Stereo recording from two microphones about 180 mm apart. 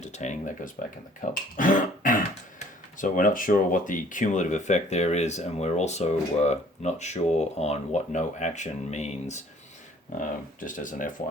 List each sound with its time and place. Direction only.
0.0 s speech: 40° left (ahead or behind)